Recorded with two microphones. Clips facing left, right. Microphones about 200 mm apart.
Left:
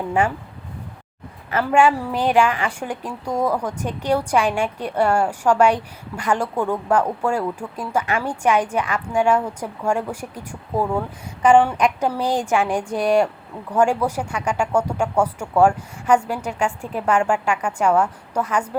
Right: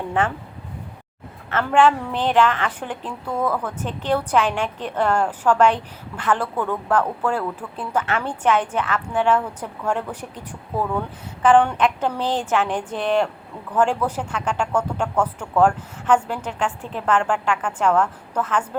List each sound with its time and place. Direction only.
0.1 s a woman's voice: 10° left (ahead or behind)
1.5 s a woman's voice: 10° left (ahead or behind)